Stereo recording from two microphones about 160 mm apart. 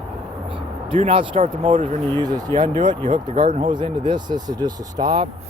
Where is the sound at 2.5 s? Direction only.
30° right (ahead or behind).